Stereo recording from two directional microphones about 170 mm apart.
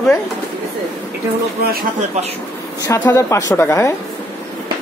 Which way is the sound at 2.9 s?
15° left (ahead or behind).